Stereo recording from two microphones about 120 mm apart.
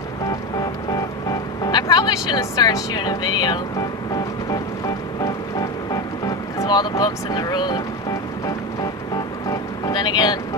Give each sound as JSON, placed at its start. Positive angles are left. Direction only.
{"t": 1.6, "sound": "music", "side_deg": 35}
{"t": 6.7, "sound": "speech", "side_deg": 35}
{"t": 9.5, "sound": "music", "side_deg": 35}